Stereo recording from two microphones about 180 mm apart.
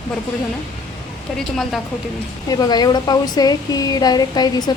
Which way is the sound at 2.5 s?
20° left (ahead or behind).